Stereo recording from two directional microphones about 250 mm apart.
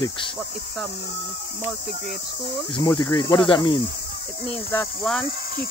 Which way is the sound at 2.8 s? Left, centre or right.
Centre.